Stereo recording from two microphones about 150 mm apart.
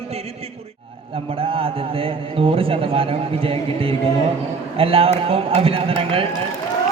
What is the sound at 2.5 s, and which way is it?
A man's voice, 40° right (ahead or behind).